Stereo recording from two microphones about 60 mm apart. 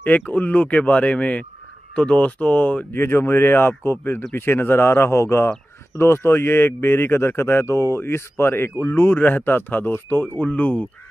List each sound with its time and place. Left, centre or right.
0.0 s speech: left
3.0 s speech: left